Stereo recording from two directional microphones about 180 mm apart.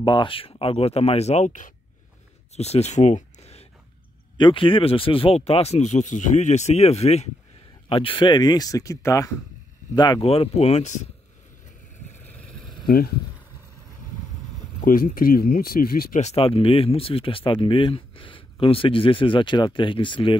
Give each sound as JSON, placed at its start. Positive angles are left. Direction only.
{"t": 0.0, "sound": "speech", "side_deg": 25}
{"t": 12.8, "sound": "speech", "side_deg": 55}
{"t": 14.9, "sound": "speech", "side_deg": 50}
{"t": 16.2, "sound": "speech", "side_deg": 35}